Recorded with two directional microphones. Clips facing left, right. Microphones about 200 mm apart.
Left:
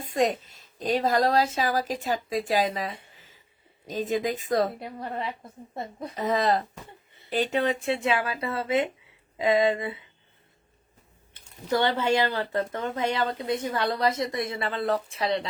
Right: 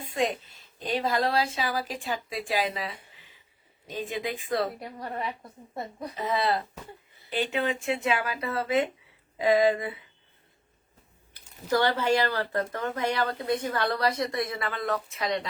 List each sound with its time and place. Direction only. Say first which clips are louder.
0.0 s a woman's voice: left 3 dB; 40° left (ahead or behind)
3.2 s a sound: left 3 dB; 45° left (ahead or behind)
3.8 s a woman's voice: left 5 dB; 40° left (ahead or behind)
4.8 s speech: left 1 dB; 25° left (ahead or behind)
6.1 s a woman's voice: left 3 dB; 40° left (ahead or behind); by 10.0 s 25° left (ahead or behind)
11.3 s speech: even; 20° left (ahead or behind)